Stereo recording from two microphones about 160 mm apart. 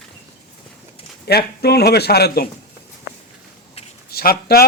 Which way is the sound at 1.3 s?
90° left.